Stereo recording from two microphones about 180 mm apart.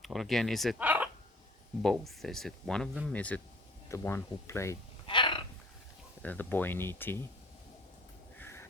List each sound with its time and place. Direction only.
0.0 s speech: centre (ahead or behind)
5.0 s dog: 25° left (ahead or behind)
6.2 s speech: 10° left (ahead or behind)
8.4 s crow: 15° left (ahead or behind)